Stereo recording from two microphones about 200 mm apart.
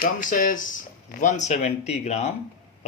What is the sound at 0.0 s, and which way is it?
Speech, 40° left (ahead or behind).